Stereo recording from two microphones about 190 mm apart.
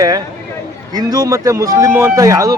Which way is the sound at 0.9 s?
20° right (ahead or behind).